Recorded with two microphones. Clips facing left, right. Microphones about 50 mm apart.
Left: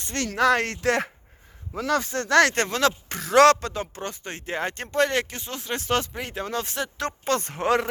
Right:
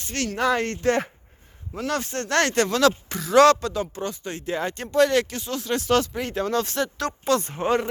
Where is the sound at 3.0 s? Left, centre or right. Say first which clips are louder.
Right 2 dB; left.